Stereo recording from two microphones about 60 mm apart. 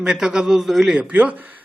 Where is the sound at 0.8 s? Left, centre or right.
Right.